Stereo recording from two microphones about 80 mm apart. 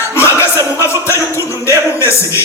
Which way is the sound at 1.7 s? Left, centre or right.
Left.